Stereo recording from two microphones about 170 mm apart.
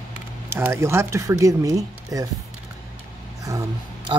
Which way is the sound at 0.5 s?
15° right (ahead or behind).